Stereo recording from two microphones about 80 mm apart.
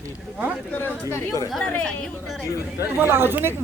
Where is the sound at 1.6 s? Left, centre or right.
Centre.